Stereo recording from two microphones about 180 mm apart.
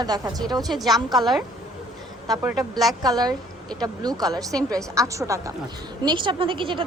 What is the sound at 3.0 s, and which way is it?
A woman's voice, 20° right (ahead or behind).